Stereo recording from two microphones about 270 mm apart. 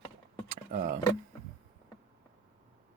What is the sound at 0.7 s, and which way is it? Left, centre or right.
Speech, right.